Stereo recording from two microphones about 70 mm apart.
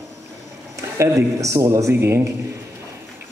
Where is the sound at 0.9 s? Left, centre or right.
Right.